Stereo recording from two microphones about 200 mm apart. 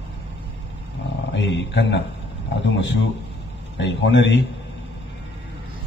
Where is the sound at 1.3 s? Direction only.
65° left (ahead or behind).